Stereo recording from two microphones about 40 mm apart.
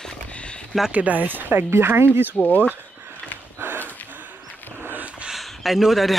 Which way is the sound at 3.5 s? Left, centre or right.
Right.